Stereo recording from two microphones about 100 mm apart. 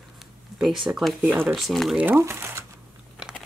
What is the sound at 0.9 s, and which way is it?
Speech, 15° right (ahead or behind).